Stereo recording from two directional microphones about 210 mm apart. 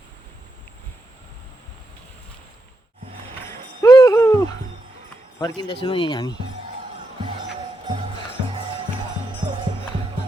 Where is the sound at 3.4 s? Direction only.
15° left (ahead or behind).